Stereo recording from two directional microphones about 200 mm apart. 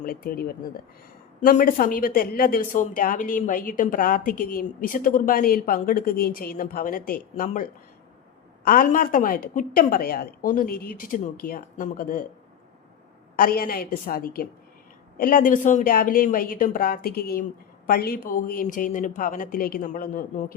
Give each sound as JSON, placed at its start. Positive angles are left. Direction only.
{"t": 0.0, "sound": "a woman's voice", "side_deg": 45}
{"t": 13.3, "sound": "a woman's voice", "side_deg": 45}